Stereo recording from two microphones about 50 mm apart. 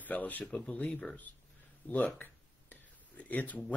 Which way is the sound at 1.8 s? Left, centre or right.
Left.